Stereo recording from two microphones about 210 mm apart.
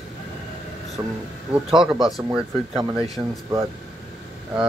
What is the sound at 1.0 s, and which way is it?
Speech, 15° right (ahead or behind).